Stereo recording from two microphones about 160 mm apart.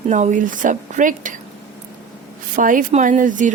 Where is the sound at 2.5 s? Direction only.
55° right (ahead or behind).